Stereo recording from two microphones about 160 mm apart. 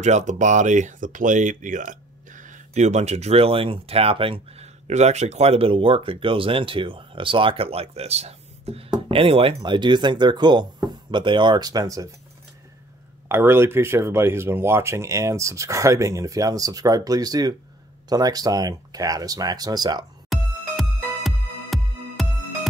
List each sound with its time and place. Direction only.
0.0 s speech: 50° right (ahead or behind); by 12.1 s 20° right (ahead or behind)
13.3 s speech: 15° right (ahead or behind)
20.2 s music: centre (ahead or behind)